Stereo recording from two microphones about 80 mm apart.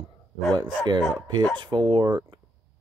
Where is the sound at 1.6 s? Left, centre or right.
Right.